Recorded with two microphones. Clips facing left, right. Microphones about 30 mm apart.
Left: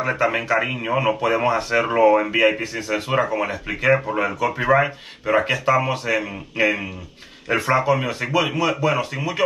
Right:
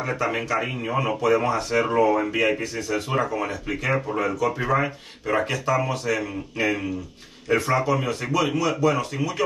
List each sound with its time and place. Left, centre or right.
0.0 s speech: left